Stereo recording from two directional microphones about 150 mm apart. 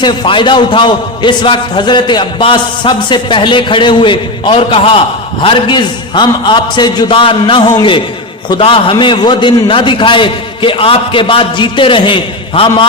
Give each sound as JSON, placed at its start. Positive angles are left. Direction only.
{"t": 0.0, "sound": "a man's voice", "side_deg": 30}